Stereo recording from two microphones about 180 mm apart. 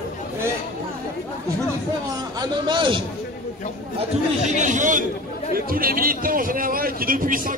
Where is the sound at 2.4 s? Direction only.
25° right (ahead or behind).